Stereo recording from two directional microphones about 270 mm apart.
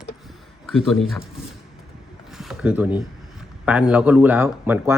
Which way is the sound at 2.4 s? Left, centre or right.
Centre.